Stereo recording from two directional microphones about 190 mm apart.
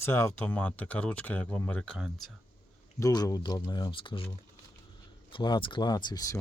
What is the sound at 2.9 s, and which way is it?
Speech, 20° left (ahead or behind).